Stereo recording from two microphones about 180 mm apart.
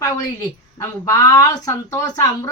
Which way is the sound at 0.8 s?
15° left (ahead or behind).